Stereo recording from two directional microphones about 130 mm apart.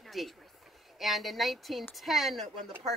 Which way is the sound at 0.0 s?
Centre (ahead or behind).